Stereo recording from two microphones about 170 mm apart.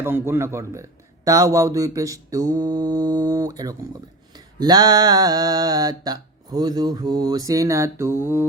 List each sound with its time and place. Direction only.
0.0 s mantra: 15° right (ahead or behind)